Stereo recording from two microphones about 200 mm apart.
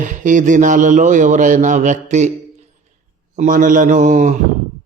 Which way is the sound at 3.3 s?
40° right (ahead or behind).